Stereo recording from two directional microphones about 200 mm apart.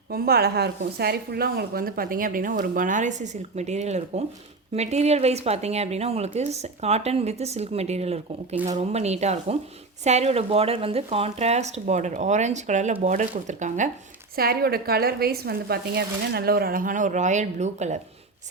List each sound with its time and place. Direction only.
0.1 s a woman's voice: 50° right (ahead or behind)
14.3 s a woman's voice: 50° right (ahead or behind)